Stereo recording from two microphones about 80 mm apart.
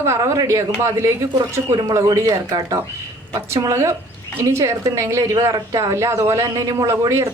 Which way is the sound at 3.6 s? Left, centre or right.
Right.